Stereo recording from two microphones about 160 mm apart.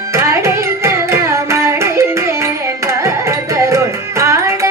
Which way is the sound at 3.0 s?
20° right (ahead or behind).